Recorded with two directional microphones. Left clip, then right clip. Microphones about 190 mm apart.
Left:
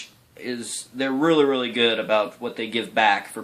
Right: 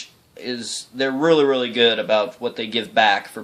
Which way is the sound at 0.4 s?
45° right (ahead or behind).